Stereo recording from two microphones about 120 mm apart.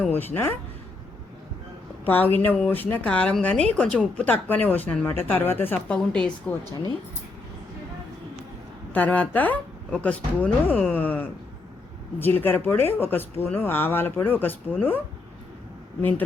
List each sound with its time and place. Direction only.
0.1 s speech: 15° left (ahead or behind)
2.0 s speech: 15° left (ahead or behind)
8.9 s speech: 15° left (ahead or behind)